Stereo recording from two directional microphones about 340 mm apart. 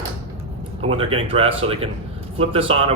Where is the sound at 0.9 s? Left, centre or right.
Centre.